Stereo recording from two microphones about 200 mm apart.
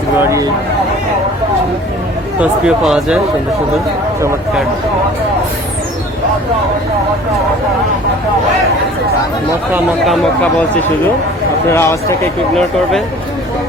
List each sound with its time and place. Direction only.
0.2 s speech: 15° right (ahead or behind)
2.4 s speech: 5° right (ahead or behind)
11.7 s speech: 15° left (ahead or behind)